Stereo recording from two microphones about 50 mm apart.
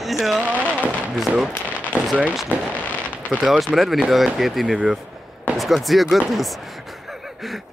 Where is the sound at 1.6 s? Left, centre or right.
Right.